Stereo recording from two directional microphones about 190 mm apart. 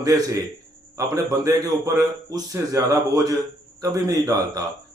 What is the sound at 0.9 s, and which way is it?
A man's voice, 15° right (ahead or behind).